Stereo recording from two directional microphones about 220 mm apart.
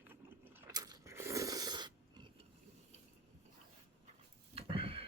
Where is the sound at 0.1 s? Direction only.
10° right (ahead or behind).